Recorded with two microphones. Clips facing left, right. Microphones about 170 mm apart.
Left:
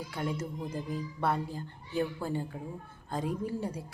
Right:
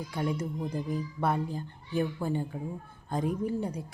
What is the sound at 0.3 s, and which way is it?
A woman's voice, 15° right (ahead or behind).